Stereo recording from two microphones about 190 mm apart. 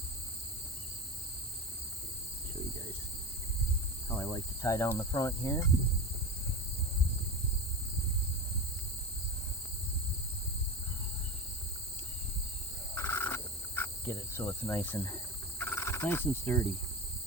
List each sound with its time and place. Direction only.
4.1 s speech: 15° left (ahead or behind)
12.9 s insect: 15° left (ahead or behind)